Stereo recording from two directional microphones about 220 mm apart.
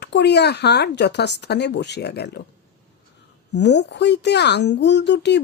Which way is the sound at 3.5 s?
50° left (ahead or behind).